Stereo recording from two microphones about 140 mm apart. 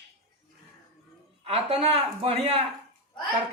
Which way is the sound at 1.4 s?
45° right (ahead or behind).